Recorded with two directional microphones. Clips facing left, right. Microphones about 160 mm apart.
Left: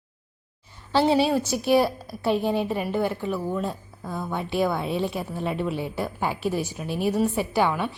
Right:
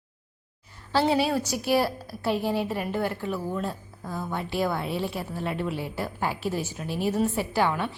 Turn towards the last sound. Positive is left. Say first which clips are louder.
# left 2 dB
turn(degrees=10)  # may be behind; listen again after turning